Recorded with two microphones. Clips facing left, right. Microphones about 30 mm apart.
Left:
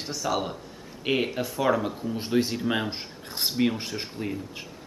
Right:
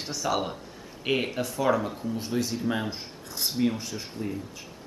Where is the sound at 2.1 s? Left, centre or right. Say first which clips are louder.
Left 5 dB; left.